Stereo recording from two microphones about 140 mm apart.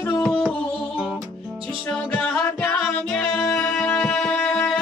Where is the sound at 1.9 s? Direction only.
10° left (ahead or behind).